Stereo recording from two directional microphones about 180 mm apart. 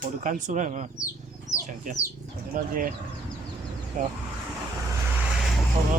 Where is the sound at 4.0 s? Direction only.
45° right (ahead or behind).